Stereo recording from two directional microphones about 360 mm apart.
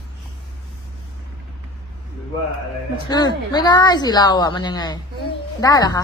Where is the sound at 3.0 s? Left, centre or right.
Centre.